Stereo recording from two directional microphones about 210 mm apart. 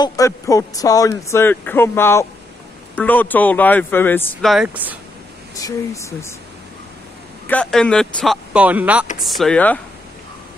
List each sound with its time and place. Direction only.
0.0 s speech: 15° left (ahead or behind); by 4.9 s 5° right (ahead or behind)
5.6 s speech: 15° left (ahead or behind)
7.4 s speech: 5° left (ahead or behind)